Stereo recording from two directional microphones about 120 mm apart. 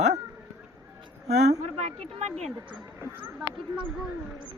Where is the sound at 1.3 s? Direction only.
65° right (ahead or behind).